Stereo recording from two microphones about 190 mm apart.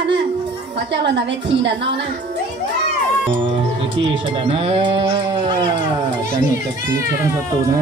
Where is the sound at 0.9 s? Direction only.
65° right (ahead or behind).